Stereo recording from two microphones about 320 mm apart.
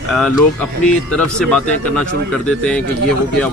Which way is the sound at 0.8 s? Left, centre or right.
Centre.